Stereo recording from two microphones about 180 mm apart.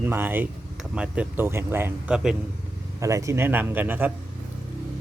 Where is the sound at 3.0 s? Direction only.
15° right (ahead or behind).